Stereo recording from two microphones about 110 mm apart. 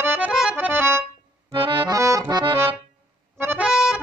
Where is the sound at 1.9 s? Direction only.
30° right (ahead or behind).